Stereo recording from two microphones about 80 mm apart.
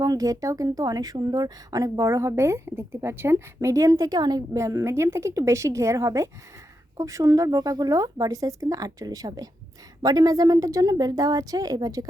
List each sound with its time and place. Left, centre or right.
0.0 s speech: right
4.5 s a woman's voice: right